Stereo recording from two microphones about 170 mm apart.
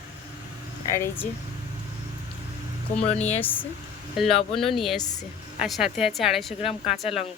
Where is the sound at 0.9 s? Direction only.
15° left (ahead or behind).